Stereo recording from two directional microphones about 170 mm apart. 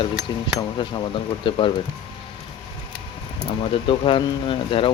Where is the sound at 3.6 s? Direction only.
30° left (ahead or behind).